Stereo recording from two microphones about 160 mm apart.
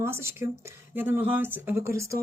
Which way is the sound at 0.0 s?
15° right (ahead or behind).